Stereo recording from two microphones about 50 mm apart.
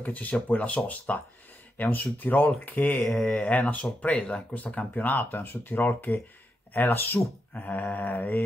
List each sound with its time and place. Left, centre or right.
0.0 s speech: left